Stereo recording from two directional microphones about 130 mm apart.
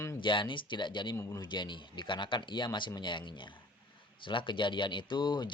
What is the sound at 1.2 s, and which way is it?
Speech, 20° left (ahead or behind).